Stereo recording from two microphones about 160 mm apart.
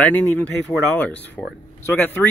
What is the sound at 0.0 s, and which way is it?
Speech, 10° left (ahead or behind).